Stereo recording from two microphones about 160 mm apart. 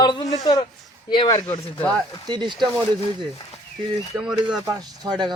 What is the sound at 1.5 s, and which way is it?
Speech, 10° left (ahead or behind).